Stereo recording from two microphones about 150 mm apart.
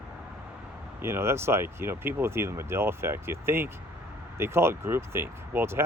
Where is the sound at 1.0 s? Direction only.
15° right (ahead or behind).